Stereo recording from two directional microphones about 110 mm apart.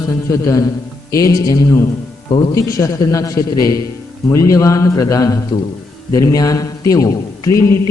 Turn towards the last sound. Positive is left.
turn(degrees=30)  # may be behind; listen again after turning